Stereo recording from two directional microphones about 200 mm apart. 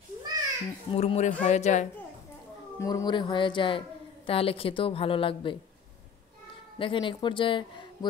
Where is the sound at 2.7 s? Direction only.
15° left (ahead or behind).